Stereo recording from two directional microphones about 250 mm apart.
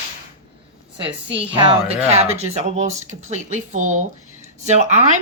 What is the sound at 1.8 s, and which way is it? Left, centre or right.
Speech, right.